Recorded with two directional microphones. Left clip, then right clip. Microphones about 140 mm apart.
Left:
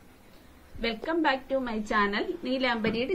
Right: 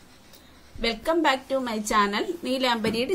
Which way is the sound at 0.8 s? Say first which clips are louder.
Right 5 dB; 25° right (ahead or behind).